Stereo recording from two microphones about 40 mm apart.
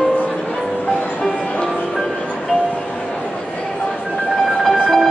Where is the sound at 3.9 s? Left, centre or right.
Centre.